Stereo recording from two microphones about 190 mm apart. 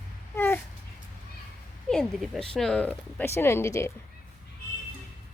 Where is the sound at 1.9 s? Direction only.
Centre (ahead or behind).